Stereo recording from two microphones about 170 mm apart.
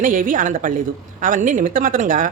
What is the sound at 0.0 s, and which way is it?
A woman's voice, 50° right (ahead or behind).